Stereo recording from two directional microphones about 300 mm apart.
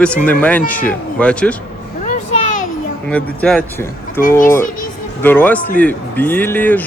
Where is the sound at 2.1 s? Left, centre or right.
Left.